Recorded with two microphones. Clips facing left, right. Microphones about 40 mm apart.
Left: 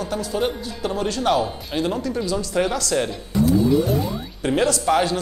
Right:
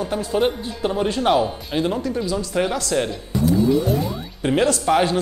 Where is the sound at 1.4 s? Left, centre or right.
Centre.